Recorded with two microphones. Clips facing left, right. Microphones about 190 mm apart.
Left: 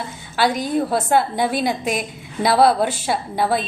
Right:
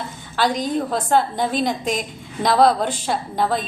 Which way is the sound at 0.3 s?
10° left (ahead or behind).